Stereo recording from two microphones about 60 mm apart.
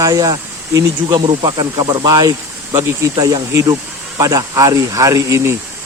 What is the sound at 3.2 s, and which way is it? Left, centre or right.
Speech, right.